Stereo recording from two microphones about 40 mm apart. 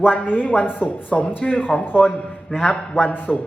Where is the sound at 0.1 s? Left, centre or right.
Left.